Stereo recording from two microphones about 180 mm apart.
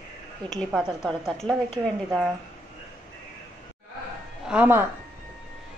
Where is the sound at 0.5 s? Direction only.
Centre (ahead or behind).